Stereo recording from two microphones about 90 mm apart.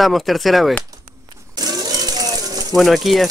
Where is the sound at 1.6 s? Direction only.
45° right (ahead or behind).